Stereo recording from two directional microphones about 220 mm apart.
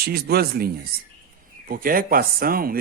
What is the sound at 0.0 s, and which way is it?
Speech, 45° right (ahead or behind).